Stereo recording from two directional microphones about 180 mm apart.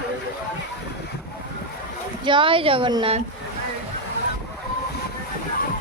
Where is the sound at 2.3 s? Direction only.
30° right (ahead or behind).